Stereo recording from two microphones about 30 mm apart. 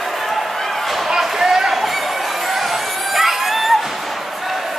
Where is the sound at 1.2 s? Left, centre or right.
Centre.